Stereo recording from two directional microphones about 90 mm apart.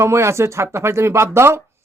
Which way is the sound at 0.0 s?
30° right (ahead or behind).